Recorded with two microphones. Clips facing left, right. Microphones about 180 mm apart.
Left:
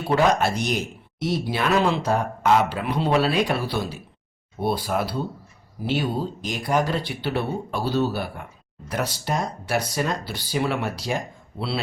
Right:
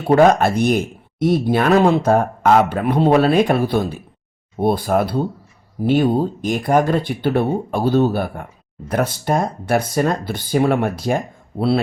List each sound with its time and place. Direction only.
0.0 s speech: 50° right (ahead or behind)